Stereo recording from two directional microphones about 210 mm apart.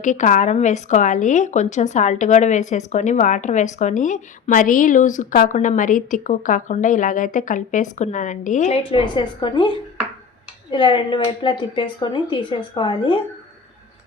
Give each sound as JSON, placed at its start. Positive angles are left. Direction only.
{"t": 0.0, "sound": "speech", "side_deg": 35}
{"t": 8.9, "sound": "speech", "side_deg": 25}